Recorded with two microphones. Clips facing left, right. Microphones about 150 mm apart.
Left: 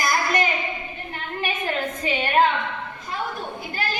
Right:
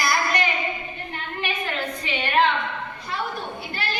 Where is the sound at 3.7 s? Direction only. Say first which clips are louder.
Left 3 dB; 45° left (ahead or behind).